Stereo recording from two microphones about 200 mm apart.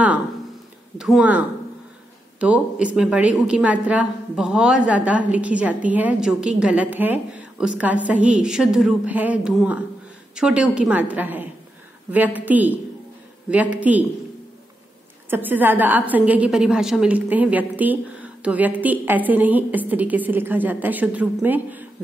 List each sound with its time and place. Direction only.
0.9 s speech: 5° right (ahead or behind)
2.4 s a woman's voice: 5° right (ahead or behind)
15.2 s a woman's voice: 10° right (ahead or behind)